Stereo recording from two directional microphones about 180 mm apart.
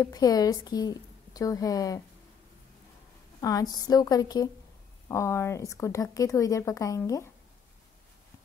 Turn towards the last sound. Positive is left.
turn(degrees=20)  # may be behind; listen again after turning